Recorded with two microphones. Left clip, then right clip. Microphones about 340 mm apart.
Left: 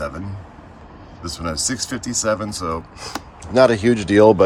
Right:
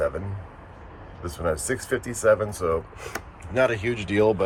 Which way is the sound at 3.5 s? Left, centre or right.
Left.